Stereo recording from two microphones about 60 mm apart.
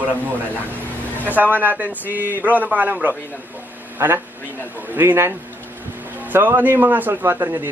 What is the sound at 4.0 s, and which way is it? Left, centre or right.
A man's voice, right.